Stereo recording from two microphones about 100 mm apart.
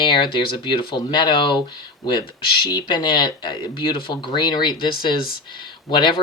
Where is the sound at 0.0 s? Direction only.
55° left (ahead or behind).